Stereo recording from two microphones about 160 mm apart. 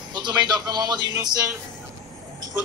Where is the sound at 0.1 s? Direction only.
25° right (ahead or behind).